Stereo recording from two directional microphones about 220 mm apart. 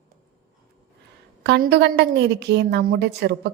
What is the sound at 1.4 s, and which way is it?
A woman's voice, 50° right (ahead or behind).